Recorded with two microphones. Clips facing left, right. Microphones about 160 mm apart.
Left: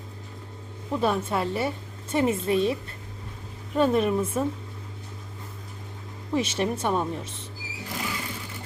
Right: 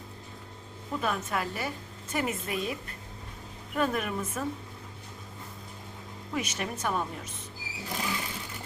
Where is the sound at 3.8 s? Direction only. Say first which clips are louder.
Left 8 dB; 30° left (ahead or behind).